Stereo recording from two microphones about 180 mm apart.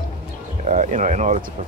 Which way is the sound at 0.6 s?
40° right (ahead or behind).